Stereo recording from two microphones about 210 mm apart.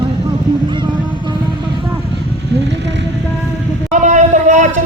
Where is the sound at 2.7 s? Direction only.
55° right (ahead or behind).